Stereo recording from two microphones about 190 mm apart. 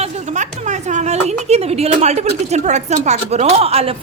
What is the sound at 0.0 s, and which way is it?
A woman's voice, 40° right (ahead or behind).